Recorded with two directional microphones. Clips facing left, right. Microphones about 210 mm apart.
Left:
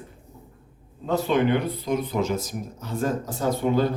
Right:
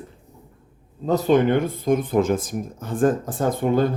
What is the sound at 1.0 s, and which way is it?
Speech, 40° right (ahead or behind).